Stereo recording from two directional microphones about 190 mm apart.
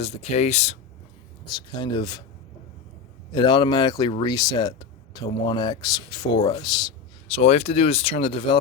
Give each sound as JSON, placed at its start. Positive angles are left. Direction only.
{"t": 0.0, "sound": "speech", "side_deg": 35}
{"t": 1.5, "sound": "speech", "side_deg": 25}
{"t": 3.3, "sound": "speech", "side_deg": 25}